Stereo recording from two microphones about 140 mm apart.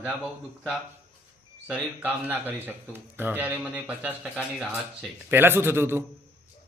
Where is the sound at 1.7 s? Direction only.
10° right (ahead or behind).